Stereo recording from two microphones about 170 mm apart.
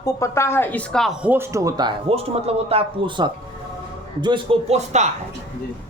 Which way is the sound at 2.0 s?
35° right (ahead or behind).